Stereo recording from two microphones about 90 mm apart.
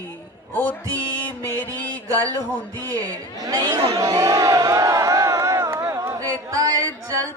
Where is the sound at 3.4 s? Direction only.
50° right (ahead or behind).